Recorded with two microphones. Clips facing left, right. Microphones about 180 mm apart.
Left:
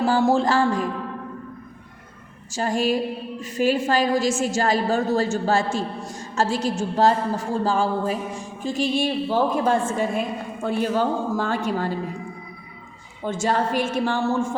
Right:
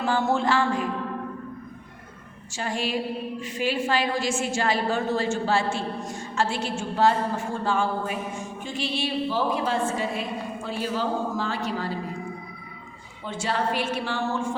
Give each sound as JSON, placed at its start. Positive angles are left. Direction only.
{"t": 0.0, "sound": "a woman's voice", "side_deg": 35}
{"t": 2.5, "sound": "a woman's voice", "side_deg": 40}
{"t": 13.2, "sound": "a woman's voice", "side_deg": 45}